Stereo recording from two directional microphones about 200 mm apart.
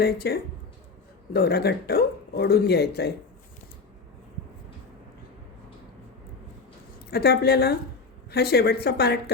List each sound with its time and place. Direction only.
0.0 s speech: 50° left (ahead or behind)
7.1 s speech: 50° left (ahead or behind)